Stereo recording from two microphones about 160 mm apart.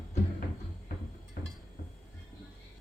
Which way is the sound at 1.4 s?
70° left (ahead or behind).